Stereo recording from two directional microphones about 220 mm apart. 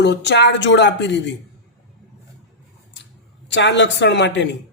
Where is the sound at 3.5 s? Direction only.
55° left (ahead or behind).